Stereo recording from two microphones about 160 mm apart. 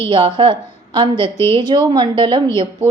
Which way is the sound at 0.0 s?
30° right (ahead or behind).